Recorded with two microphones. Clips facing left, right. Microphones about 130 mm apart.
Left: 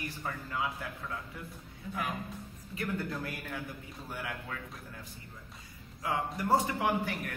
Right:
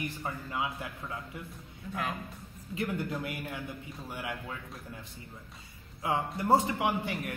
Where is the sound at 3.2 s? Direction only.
20° right (ahead or behind).